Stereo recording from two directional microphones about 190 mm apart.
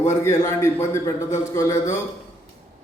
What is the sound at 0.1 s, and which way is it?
A man's voice, 15° left (ahead or behind).